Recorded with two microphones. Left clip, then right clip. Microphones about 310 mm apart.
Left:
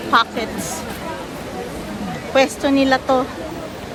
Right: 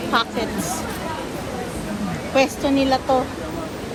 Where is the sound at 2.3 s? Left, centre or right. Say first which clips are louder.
Left 3 dB; left.